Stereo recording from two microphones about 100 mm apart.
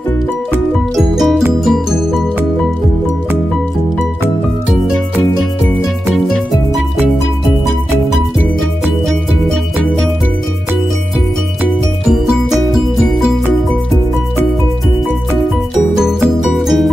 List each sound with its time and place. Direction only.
0.9 s music: centre (ahead or behind)
6.1 s music: centre (ahead or behind)
12.1 s music: 5° right (ahead or behind)
16.0 s music: 5° right (ahead or behind)